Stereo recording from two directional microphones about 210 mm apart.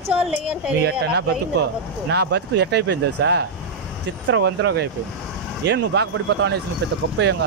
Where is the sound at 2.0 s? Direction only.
55° right (ahead or behind).